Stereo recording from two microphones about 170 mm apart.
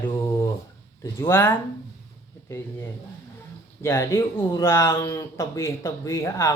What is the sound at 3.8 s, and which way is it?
Speech, 15° left (ahead or behind).